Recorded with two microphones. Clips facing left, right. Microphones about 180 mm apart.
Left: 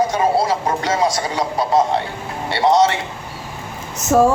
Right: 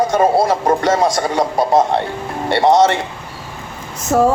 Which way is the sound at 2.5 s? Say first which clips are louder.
Right 3 dB; 50° right (ahead or behind).